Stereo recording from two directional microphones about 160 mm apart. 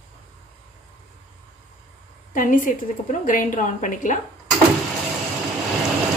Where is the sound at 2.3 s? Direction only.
55° left (ahead or behind).